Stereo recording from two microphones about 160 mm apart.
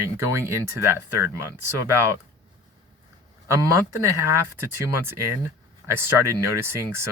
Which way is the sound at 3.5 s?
15° right (ahead or behind).